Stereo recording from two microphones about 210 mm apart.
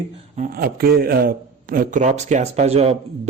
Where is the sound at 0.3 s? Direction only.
40° right (ahead or behind).